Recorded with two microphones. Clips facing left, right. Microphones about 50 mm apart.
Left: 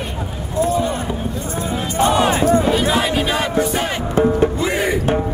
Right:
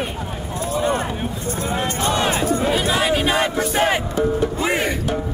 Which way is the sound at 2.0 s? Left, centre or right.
Centre.